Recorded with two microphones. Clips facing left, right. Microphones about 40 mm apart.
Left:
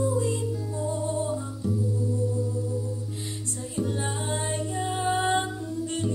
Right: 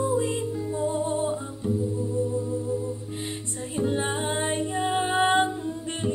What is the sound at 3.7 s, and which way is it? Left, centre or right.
Music, right.